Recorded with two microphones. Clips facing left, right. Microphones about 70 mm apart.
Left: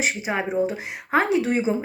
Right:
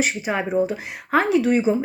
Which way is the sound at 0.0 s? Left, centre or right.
Left.